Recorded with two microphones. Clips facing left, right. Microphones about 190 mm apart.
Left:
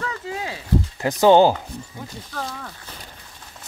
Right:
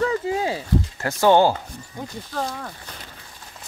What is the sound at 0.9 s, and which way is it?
Speech, 15° left (ahead or behind).